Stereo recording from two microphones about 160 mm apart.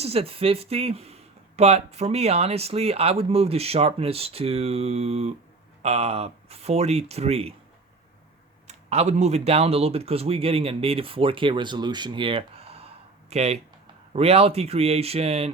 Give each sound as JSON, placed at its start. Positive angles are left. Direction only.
{"t": 0.0, "sound": "speech", "side_deg": -40}
{"t": 8.6, "sound": "speech", "side_deg": -45}